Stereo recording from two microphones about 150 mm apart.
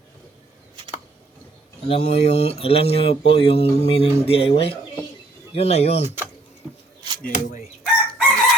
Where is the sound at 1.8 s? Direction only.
45° left (ahead or behind).